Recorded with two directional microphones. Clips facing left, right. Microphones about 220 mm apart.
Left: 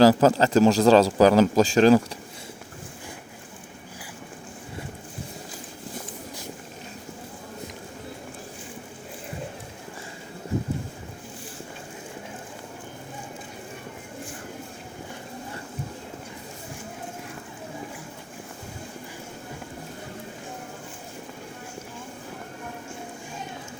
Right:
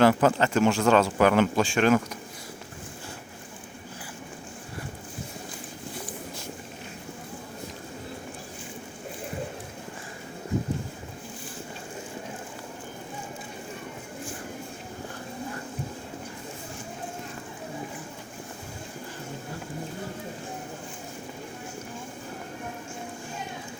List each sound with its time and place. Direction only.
0.0 s speech: 35° left (ahead or behind)